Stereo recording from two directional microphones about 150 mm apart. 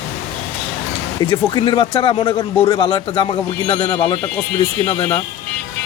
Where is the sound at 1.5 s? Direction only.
30° left (ahead or behind).